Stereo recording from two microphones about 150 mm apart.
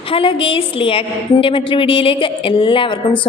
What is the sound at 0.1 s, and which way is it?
A woman's voice, 35° left (ahead or behind).